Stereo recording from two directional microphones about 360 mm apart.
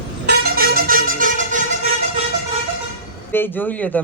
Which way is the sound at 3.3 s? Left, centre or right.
Centre.